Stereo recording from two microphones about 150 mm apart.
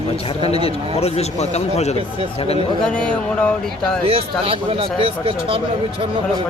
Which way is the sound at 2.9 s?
5° left (ahead or behind).